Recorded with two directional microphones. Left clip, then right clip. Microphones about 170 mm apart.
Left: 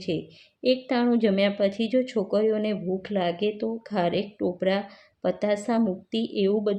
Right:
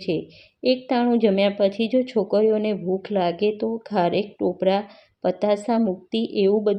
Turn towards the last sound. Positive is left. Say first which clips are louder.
# right 5 dB
turn(degrees=-15)  # may be behind; listen again after turning